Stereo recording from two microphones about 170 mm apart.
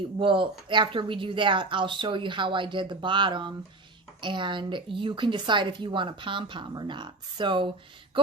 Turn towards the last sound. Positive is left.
turn(degrees=-30)  # may be behind; listen again after turning